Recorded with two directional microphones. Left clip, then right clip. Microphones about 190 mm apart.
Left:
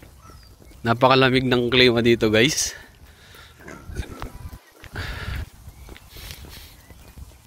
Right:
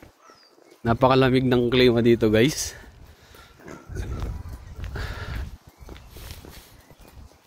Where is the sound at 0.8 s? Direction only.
10° right (ahead or behind).